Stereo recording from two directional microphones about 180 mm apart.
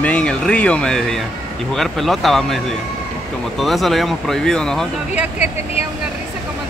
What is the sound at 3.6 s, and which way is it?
Speech, centre (ahead or behind).